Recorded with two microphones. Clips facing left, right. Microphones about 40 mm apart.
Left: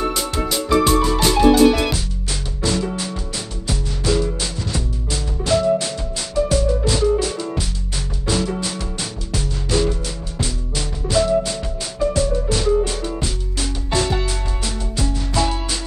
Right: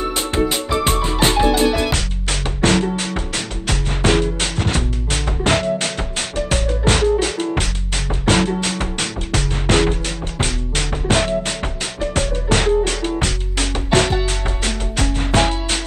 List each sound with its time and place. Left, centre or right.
0.8 s music: right
2.6 s music: right
13.8 s music: right